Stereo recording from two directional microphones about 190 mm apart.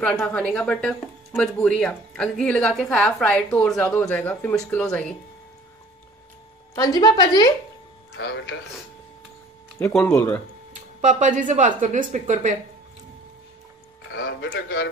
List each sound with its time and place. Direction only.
0.0 s speech: 5° left (ahead or behind)
6.7 s a woman's voice: 20° left (ahead or behind)
9.8 s speech: 10° left (ahead or behind)
10.7 s speech: 40° right (ahead or behind)
14.1 s speech: 70° left (ahead or behind)